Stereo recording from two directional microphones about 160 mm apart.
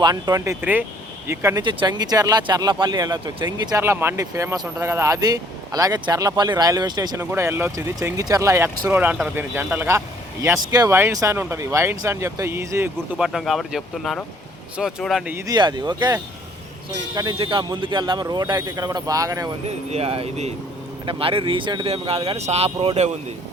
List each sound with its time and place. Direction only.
0.0 s speech: 25° right (ahead or behind)
1.6 s speech: 30° right (ahead or behind)
13.1 s speech: centre (ahead or behind)
15.4 s speech: 25° right (ahead or behind)
19.6 s speech: 40° right (ahead or behind)